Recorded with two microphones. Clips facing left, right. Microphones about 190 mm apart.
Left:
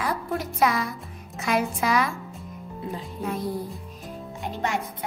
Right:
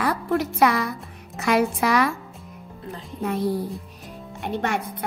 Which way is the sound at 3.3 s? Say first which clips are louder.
Right 5 dB; 70° right (ahead or behind).